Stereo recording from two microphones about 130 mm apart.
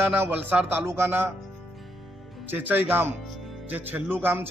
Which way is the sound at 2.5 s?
15° right (ahead or behind).